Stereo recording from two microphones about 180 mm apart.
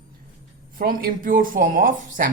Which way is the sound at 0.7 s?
50° right (ahead or behind).